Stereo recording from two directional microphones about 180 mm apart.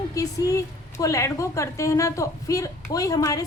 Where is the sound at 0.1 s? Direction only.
20° left (ahead or behind).